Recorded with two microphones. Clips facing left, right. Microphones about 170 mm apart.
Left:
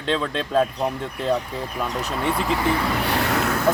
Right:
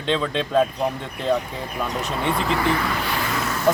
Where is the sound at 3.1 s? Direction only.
70° left (ahead or behind).